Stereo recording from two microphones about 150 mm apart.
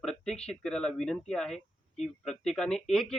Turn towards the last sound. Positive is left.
turn(degrees=5)  # may be behind; listen again after turning